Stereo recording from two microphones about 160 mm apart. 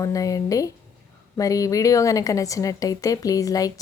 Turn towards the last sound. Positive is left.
turn(degrees=20)  # may be behind; listen again after turning